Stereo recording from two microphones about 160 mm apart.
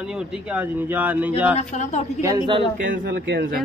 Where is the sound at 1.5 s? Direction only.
45° left (ahead or behind).